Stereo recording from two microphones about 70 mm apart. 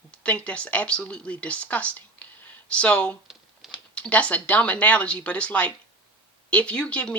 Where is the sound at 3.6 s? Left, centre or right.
Centre.